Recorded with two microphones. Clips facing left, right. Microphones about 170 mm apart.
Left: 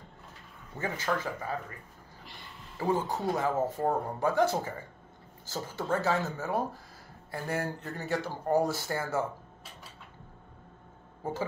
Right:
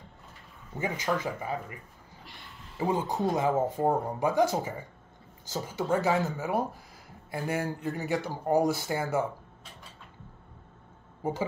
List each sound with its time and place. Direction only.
0.7 s speech: 15° right (ahead or behind)
2.8 s speech: 20° right (ahead or behind)
11.2 s speech: 15° right (ahead or behind)